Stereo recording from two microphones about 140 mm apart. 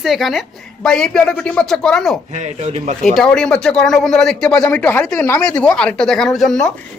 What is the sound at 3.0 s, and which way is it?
A man's voice, 5° left (ahead or behind).